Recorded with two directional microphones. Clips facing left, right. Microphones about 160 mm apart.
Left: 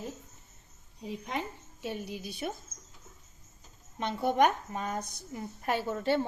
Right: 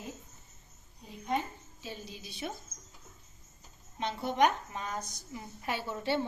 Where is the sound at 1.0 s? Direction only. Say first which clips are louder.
Right 1 dB; 90° left; by 2.5 s 60° left (ahead or behind).